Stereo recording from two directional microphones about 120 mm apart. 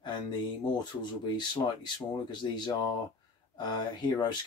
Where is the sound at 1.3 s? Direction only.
40° left (ahead or behind).